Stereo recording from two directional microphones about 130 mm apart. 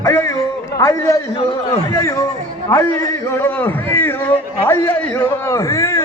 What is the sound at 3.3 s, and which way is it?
A man's voice, 15° left (ahead or behind).